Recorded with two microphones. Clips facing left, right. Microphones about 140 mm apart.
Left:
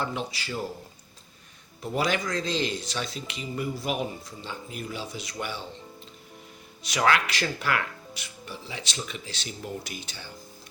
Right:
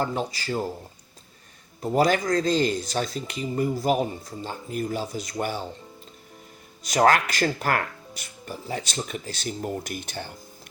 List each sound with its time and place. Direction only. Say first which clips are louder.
0.0 s speech: right 4 dB; 40° right (ahead or behind)
1.8 s speech: right 6 dB; 40° right (ahead or behind)
6.8 s speech: right 5 dB; 45° right (ahead or behind)